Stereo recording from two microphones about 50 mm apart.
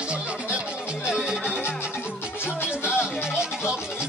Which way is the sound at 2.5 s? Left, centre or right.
Left.